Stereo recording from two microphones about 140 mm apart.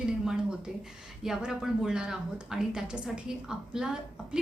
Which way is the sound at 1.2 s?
5° right (ahead or behind).